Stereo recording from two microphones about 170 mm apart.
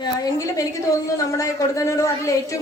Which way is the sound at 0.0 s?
20° left (ahead or behind).